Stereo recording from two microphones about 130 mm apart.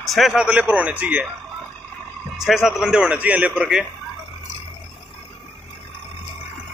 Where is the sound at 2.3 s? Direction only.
Centre (ahead or behind).